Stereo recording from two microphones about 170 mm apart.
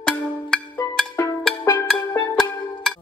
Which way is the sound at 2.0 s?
15° left (ahead or behind).